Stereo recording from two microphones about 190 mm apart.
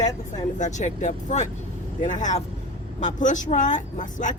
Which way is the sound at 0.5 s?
40° left (ahead or behind).